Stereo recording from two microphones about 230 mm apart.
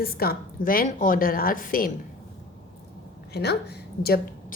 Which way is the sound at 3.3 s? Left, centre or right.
Left.